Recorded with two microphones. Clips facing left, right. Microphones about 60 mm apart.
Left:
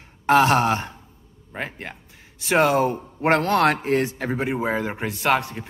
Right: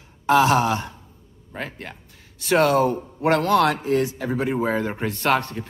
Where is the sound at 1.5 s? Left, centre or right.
Centre; by 4.4 s left.